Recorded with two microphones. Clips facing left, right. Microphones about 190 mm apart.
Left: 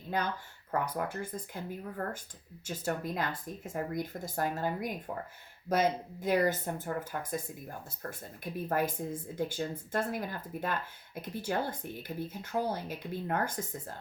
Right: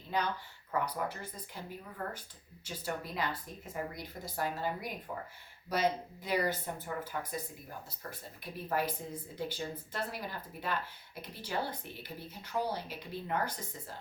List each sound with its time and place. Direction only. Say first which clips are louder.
0.1 s speech: left 1 dB; 50° left (ahead or behind)
2.6 s speech: left 5 dB; 45° left (ahead or behind)
8.7 s speech: left 2 dB; 50° left (ahead or behind)